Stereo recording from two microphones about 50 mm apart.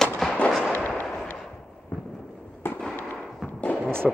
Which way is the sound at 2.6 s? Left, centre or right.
Left.